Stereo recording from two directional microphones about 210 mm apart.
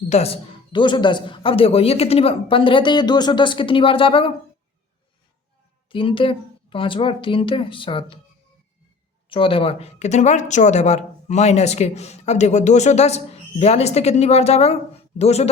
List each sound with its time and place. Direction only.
0.1 s speech: 30° left (ahead or behind)
5.9 s speech: 25° left (ahead or behind)
9.3 s speech: 25° left (ahead or behind)